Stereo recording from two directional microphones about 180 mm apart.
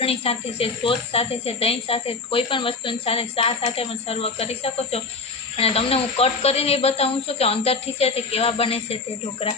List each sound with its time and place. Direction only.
0.0 s speech: 35° left (ahead or behind)